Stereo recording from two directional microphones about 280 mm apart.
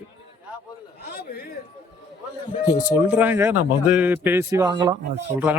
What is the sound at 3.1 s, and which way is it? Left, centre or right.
Speech, centre.